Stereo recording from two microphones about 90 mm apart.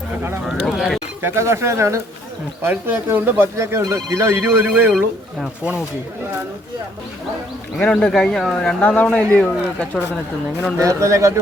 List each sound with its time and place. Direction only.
0.4 s speech: 5° right (ahead or behind)
1.2 s speech: 30° right (ahead or behind)
7.8 s speech: 5° left (ahead or behind)
10.8 s speech: 35° right (ahead or behind)